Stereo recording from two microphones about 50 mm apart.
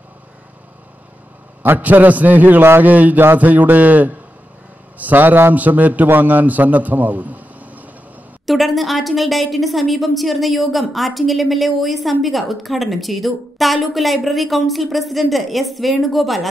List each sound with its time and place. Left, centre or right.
1.6 s a man's voice: right
8.5 s a woman's voice: centre